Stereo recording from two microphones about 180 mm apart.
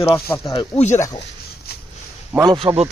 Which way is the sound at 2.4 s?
25° right (ahead or behind).